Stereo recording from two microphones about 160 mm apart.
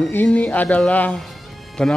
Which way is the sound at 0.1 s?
10° left (ahead or behind).